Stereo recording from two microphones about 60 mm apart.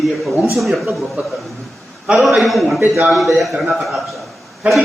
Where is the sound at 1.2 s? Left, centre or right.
Right.